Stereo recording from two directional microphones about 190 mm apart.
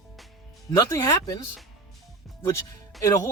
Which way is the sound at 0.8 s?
15° left (ahead or behind).